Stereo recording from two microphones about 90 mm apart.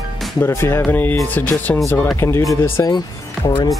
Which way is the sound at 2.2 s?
35° left (ahead or behind).